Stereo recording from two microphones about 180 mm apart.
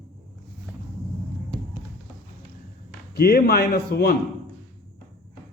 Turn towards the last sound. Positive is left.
turn(degrees=60)  # may be behind; listen again after turning